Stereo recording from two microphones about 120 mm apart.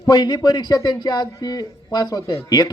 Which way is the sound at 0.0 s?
35° left (ahead or behind).